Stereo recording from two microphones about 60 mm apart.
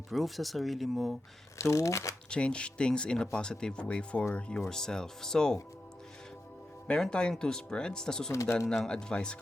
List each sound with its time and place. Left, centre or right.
0.1 s speech: centre
1.5 s speech: left
2.3 s speech: centre
6.8 s speech: centre